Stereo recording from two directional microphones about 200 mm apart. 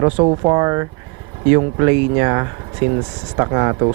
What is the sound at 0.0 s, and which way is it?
Speech, 25° right (ahead or behind).